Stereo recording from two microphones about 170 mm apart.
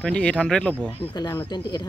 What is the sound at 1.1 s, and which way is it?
Speech, 25° left (ahead or behind).